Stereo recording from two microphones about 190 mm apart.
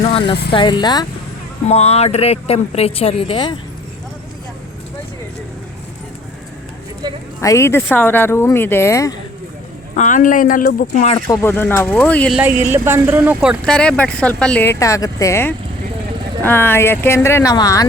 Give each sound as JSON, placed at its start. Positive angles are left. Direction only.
{"t": 0.0, "sound": "speech", "side_deg": 30}
{"t": 1.6, "sound": "speech", "side_deg": 35}
{"t": 7.0, "sound": "speech", "side_deg": -25}
{"t": 7.4, "sound": "speech", "side_deg": 15}
{"t": 9.9, "sound": "speech", "side_deg": 40}
{"t": 11.3, "sound": "speech", "side_deg": 10}
{"t": 12.4, "sound": "speech", "side_deg": -10}
{"t": 13.7, "sound": "speech", "side_deg": 5}